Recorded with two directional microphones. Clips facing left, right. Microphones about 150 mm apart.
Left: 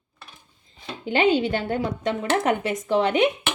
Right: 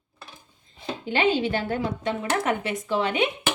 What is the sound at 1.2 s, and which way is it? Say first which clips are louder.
Speech: left 3 dB; 40° left (ahead or behind).